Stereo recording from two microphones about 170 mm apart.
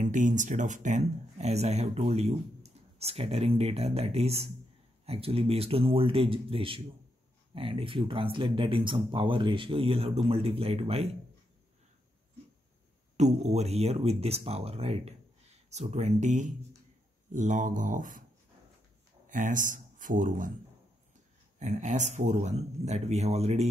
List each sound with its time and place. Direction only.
0.0 s speech: 45° right (ahead or behind)
13.2 s speech: 40° right (ahead or behind)
19.2 s speech: 50° right (ahead or behind)
21.5 s speech: 45° right (ahead or behind)